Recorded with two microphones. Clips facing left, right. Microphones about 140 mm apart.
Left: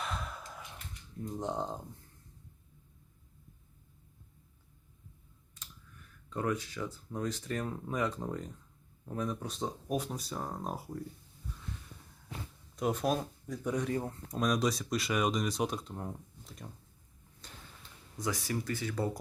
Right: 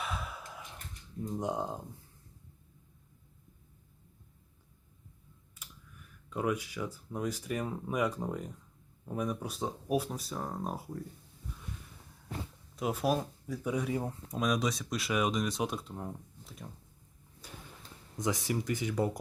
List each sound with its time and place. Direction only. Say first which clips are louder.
0.0 s sigh: even; 5° right (ahead or behind)
1.4 s speech: right 1 dB; 10° right (ahead or behind)
5.6 s computer keyboard: right 1 dB; 10° right (ahead or behind)
6.3 s speech: right 1 dB; 10° right (ahead or behind)
12.7 s speech: even; 5° right (ahead or behind)
17.4 s a sound: right 4 dB; 10° right (ahead or behind)
18.2 s speech: right 2 dB; 20° right (ahead or behind)